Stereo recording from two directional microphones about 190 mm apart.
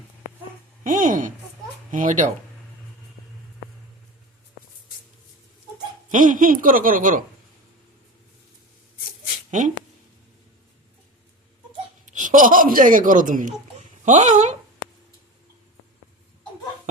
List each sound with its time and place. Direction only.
0.9 s a woman's voice: 45° right (ahead or behind)
6.1 s speech: 45° right (ahead or behind)
9.5 s speech: 40° right (ahead or behind)
12.0 s speech: 40° right (ahead or behind)